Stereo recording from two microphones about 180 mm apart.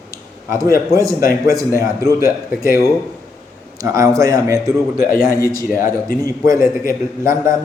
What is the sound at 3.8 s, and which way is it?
A man's voice, 15° right (ahead or behind).